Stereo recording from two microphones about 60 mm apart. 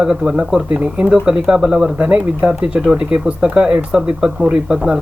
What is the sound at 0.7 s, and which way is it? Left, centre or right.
Speech, right.